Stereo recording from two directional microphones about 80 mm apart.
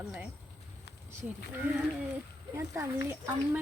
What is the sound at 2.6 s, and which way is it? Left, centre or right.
Speech, right.